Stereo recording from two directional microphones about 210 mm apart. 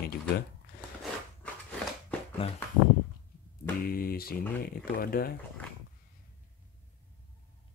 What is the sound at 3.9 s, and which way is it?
Speech, 45° left (ahead or behind).